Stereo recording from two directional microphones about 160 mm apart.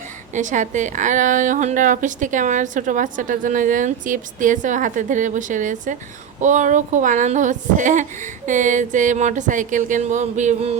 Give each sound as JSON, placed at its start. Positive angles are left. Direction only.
{"t": 0.3, "sound": "a woman's voice", "side_deg": -50}